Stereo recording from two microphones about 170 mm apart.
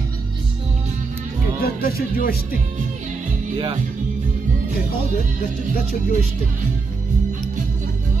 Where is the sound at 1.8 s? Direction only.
60° left (ahead or behind).